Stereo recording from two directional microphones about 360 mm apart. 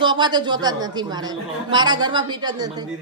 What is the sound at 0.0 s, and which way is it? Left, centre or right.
A woman's voice, centre.